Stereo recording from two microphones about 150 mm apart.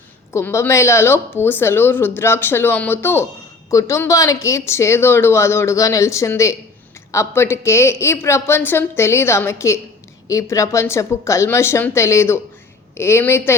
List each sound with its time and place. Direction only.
0.3 s speech: 15° left (ahead or behind)